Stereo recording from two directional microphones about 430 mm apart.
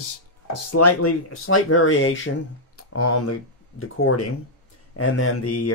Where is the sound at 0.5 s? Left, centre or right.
Left.